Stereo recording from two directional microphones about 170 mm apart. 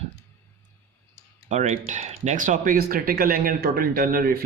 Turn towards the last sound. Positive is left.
turn(degrees=-60)  # may be behind; listen again after turning